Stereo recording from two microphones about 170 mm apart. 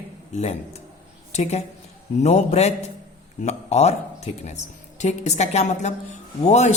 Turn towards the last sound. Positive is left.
turn(degrees=40)  # may be behind; listen again after turning